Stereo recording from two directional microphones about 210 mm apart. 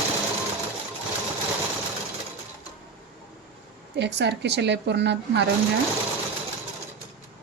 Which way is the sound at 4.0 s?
55° right (ahead or behind).